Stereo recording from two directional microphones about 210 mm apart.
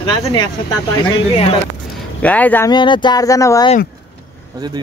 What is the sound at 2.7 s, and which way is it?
Speech, 20° left (ahead or behind).